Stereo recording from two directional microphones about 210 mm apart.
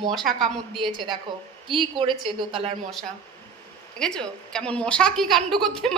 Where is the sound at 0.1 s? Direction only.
Centre (ahead or behind).